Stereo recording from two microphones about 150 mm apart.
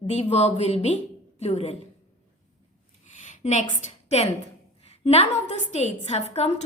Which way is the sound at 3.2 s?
55° left (ahead or behind).